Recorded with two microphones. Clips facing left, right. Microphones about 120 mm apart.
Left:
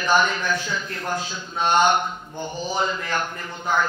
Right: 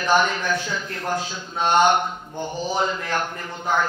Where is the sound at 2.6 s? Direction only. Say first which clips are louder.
Right 1 dB; 50° right (ahead or behind).